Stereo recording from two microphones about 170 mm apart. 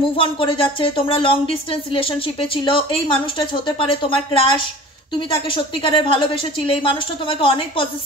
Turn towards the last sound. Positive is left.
turn(degrees=30)  # may be behind; listen again after turning